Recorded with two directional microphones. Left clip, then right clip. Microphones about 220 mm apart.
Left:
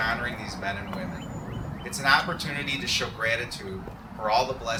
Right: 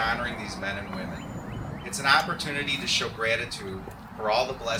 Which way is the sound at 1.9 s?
15° left (ahead or behind).